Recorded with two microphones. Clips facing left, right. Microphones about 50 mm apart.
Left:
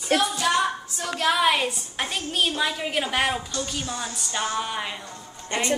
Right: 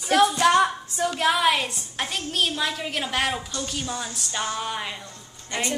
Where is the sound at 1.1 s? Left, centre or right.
Centre.